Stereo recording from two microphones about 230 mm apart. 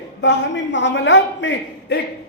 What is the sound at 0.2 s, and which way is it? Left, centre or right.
A man's voice, left.